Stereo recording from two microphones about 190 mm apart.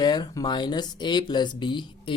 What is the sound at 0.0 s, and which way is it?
Speech, 20° left (ahead or behind).